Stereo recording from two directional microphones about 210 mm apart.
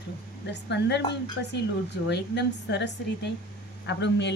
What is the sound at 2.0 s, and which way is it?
A woman's voice, 55° left (ahead or behind).